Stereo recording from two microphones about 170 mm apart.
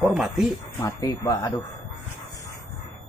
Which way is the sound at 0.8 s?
15° left (ahead or behind).